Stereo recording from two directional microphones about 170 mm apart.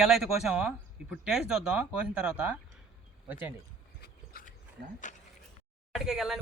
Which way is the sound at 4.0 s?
60° left (ahead or behind).